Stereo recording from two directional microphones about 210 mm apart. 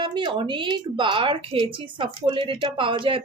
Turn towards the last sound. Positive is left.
turn(degrees=-25)  # may be behind; listen again after turning